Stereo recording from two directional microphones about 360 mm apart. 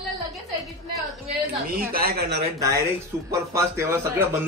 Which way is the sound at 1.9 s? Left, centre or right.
Right.